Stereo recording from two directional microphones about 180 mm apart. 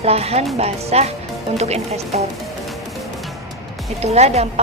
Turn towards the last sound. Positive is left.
turn(degrees=-35)  # may be behind; listen again after turning